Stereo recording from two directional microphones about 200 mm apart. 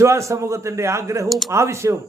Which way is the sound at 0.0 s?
15° right (ahead or behind).